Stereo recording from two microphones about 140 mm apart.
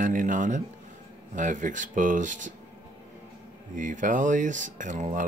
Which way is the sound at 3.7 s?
65° right (ahead or behind).